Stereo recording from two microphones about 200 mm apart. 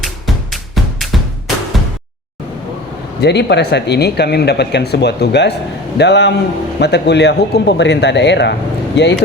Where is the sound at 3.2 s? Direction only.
60° left (ahead or behind).